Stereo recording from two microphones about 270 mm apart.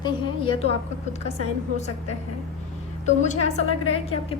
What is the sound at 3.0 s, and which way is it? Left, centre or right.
Speech, left.